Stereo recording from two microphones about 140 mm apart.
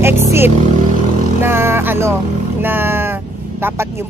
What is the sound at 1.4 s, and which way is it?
Speech, 15° right (ahead or behind).